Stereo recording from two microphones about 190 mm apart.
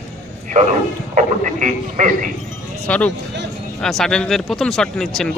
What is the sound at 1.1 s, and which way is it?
A man's voice, 40° right (ahead or behind).